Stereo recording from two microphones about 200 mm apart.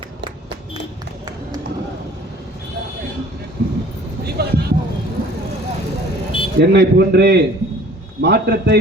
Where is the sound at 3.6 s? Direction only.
50° right (ahead or behind).